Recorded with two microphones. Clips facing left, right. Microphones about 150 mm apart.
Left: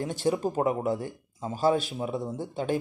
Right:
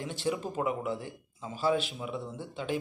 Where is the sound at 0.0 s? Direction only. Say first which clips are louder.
Left 6 dB; 45° left (ahead or behind).